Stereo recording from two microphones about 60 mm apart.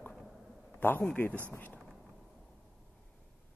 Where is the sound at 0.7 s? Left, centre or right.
Left.